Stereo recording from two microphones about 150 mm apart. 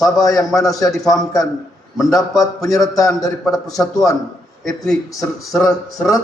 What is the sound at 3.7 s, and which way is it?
Speech, 25° left (ahead or behind).